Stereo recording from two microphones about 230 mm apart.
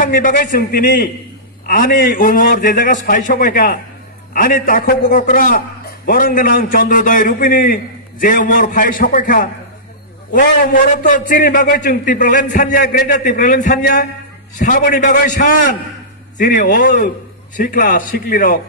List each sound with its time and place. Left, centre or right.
0.0 s a man's voice: left